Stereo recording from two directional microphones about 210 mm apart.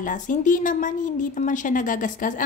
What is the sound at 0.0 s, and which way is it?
A woman's voice, 40° left (ahead or behind).